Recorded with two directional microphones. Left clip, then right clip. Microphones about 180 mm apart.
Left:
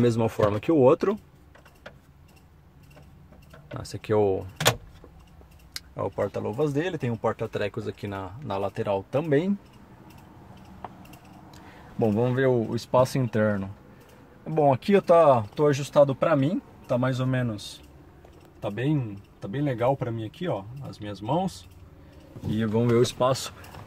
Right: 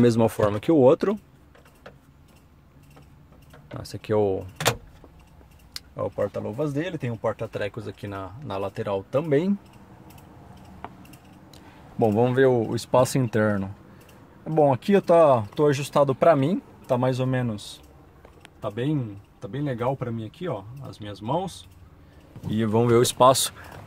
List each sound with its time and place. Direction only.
0.0 s speech: 15° right (ahead or behind)
3.6 s speech: centre (ahead or behind)
5.7 s a sound: centre (ahead or behind)
6.2 s speech: 10° left (ahead or behind)
11.5 s a sound: 15° right (ahead or behind)
12.2 s speech: 30° right (ahead or behind)
15.7 s speech: 40° right (ahead or behind)
16.0 s speech: 55° right (ahead or behind); by 17.6 s 35° right (ahead or behind)
19.4 s speech: 15° right (ahead or behind)
20.9 s speech: 35° right (ahead or behind)
22.6 s speech: 55° right (ahead or behind)